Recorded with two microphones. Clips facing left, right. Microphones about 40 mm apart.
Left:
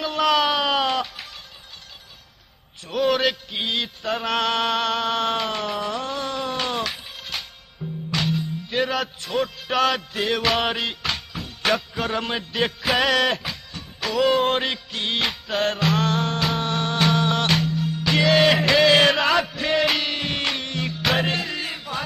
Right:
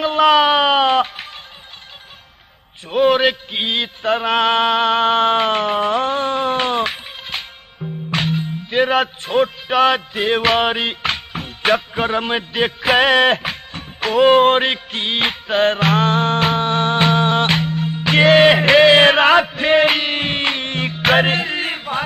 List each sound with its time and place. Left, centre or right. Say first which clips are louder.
0.0 s music: right 7 dB; right
2.9 s a sound: right 7 dB; right
8.1 s music: right 4 dB; right
9.7 s music: right 6 dB; right